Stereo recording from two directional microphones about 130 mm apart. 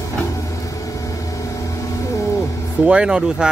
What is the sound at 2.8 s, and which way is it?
Speech, 5° right (ahead or behind).